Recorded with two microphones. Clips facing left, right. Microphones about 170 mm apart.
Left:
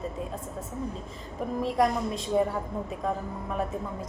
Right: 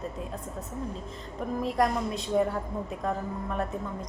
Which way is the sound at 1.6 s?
Centre (ahead or behind).